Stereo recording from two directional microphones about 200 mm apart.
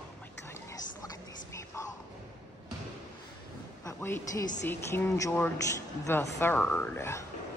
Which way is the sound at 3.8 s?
15° left (ahead or behind).